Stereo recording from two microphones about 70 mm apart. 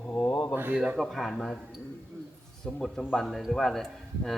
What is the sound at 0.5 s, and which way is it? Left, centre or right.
Speech, right.